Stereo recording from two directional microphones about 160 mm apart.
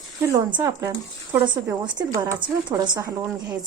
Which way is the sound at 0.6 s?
20° right (ahead or behind).